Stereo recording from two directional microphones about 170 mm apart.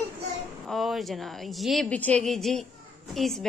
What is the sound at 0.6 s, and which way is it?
A woman's voice, centre (ahead or behind).